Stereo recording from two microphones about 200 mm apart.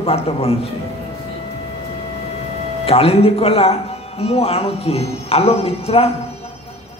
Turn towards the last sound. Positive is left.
turn(degrees=30)  # may be behind; listen again after turning